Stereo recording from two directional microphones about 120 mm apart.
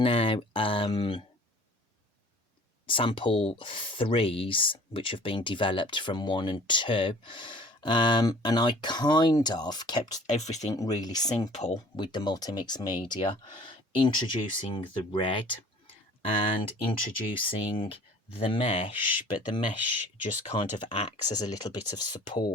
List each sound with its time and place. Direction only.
0.0 s speech: 45° left (ahead or behind)
2.8 s speech: 45° left (ahead or behind)
10.2 s speech: 70° left (ahead or behind)
10.8 s speech: 30° left (ahead or behind)
11.5 s speech: 70° left (ahead or behind)
11.9 s speech: 35° left (ahead or behind); by 18.9 s 65° left (ahead or behind)
20.4 s speech: 50° left (ahead or behind)